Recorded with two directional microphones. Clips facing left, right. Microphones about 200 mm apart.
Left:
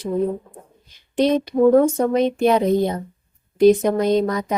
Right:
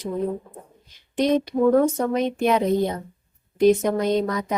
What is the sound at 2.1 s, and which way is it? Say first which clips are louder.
Speech: left 4 dB; 35° left (ahead or behind).